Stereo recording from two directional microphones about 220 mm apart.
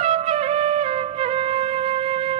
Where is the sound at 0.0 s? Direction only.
25° right (ahead or behind).